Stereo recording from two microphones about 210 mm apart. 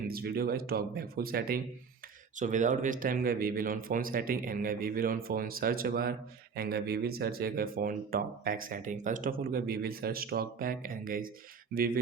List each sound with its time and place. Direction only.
0.1 s speech: 45° right (ahead or behind)